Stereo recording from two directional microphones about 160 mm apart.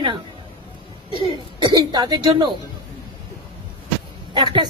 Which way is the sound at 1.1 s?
30° right (ahead or behind).